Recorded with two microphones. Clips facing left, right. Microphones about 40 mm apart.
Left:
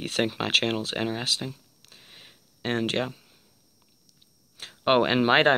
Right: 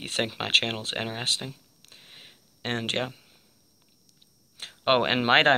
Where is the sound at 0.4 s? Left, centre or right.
Right.